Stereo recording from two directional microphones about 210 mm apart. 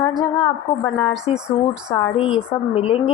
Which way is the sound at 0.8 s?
Centre (ahead or behind).